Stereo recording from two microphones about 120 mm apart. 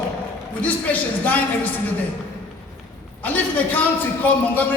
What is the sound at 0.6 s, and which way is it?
Speech, 15° left (ahead or behind).